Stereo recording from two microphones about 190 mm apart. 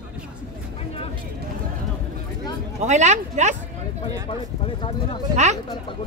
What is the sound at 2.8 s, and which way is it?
Speech, 40° right (ahead or behind).